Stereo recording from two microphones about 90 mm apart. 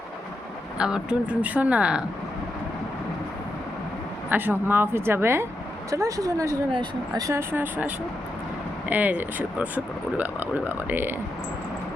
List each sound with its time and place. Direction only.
0.8 s speech: 10° right (ahead or behind)
4.3 s speech: 25° right (ahead or behind)
5.9 s speech: 40° right (ahead or behind)
7.3 s speech: 25° right (ahead or behind)